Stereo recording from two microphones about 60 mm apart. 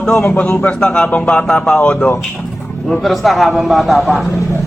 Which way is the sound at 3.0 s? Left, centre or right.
Centre.